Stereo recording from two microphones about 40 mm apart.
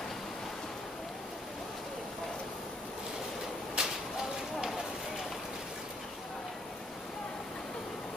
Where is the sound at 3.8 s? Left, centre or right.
Right.